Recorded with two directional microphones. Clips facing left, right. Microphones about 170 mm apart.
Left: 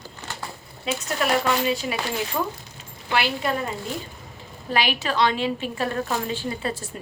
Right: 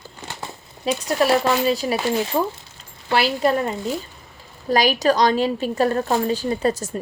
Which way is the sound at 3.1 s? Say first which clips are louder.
Right 5 dB; 35° right (ahead or behind).